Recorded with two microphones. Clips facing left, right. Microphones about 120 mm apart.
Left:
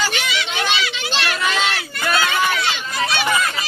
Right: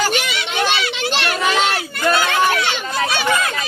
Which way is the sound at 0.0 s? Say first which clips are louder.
Right 3 dB; 50° right (ahead or behind).